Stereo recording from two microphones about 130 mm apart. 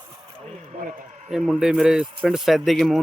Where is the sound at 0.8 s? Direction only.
80° right.